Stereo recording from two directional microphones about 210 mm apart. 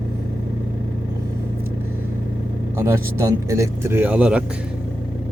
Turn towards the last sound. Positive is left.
turn(degrees=-5)  # may be behind; listen again after turning